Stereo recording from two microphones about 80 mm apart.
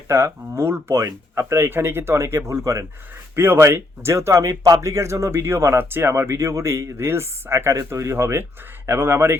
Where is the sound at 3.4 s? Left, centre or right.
Right.